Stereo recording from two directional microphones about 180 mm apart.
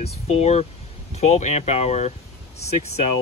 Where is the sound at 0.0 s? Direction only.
35° left (ahead or behind).